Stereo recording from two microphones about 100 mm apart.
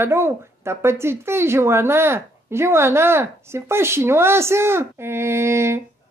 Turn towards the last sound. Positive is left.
turn(degrees=-25)  # may be behind; listen again after turning